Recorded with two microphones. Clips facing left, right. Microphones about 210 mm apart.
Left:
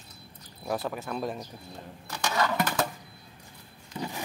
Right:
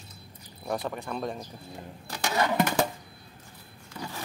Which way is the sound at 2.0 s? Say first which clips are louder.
Right 1 dB; 25° right (ahead or behind).